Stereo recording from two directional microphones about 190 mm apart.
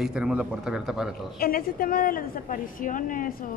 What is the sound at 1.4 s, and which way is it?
A woman's voice, 50° left (ahead or behind).